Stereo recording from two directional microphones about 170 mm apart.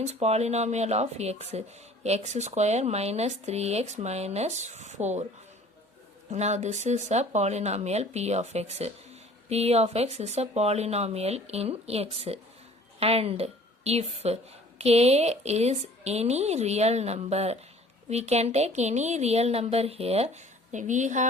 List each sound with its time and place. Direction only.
0.0 s speech: 40° right (ahead or behind)
6.3 s a woman's voice: 40° right (ahead or behind)